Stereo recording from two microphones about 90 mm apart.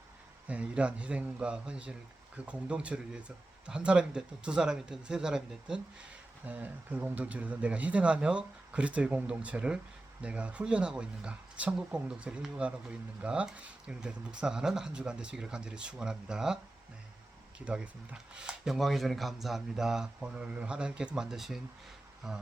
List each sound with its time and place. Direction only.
0.4 s speech: 15° right (ahead or behind)
6.4 s speech: 20° right (ahead or behind)
17.7 s speech: 10° right (ahead or behind)